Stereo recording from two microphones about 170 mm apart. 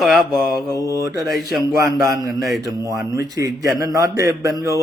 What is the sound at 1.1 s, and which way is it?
Speech, 20° right (ahead or behind).